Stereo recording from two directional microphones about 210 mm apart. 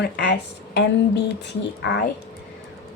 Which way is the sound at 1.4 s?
55° left (ahead or behind).